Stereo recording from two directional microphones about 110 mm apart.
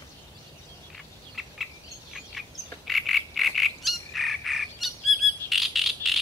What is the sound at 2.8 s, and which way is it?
Frog, centre (ahead or behind).